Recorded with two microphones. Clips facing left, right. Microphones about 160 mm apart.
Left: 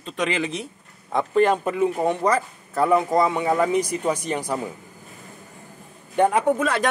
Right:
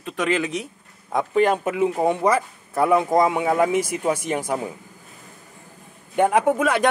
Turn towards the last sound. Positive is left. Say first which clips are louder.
# right 2 dB
turn(degrees=-10)  # may be behind; listen again after turning